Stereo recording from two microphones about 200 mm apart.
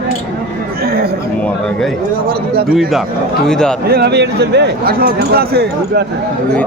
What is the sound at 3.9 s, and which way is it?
Speech, 55° right (ahead or behind).